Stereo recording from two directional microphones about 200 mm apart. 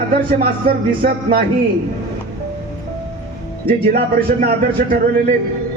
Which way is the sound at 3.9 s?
50° right (ahead or behind).